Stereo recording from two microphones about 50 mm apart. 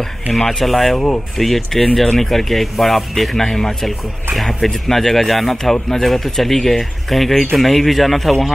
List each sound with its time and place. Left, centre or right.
0.3 s speech: centre
0.9 s speech: centre
1.4 s speech: centre